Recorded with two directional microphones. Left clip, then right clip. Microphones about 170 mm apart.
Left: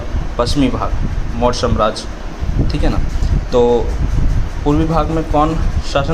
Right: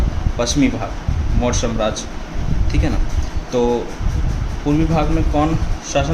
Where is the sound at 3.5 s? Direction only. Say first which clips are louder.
Left 5 dB; 10° left (ahead or behind).